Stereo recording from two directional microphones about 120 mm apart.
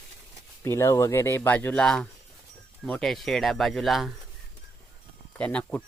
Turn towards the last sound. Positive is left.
turn(degrees=10)  # may be behind; listen again after turning